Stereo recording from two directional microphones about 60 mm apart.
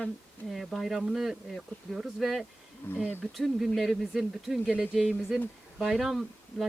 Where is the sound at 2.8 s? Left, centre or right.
Left.